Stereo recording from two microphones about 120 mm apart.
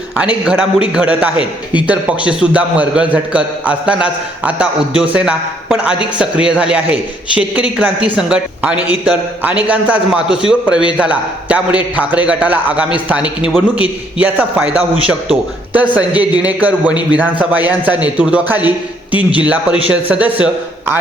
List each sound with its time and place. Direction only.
0.2 s a man's voice: 10° right (ahead or behind)
14.5 s a man's voice: 10° right (ahead or behind)